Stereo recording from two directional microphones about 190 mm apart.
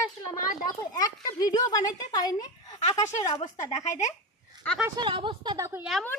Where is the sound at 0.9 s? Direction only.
20° left (ahead or behind).